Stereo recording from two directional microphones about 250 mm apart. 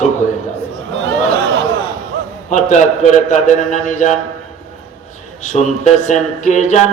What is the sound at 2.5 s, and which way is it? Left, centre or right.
Speech, left.